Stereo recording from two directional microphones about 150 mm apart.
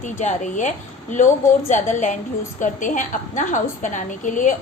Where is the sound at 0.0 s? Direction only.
55° left (ahead or behind).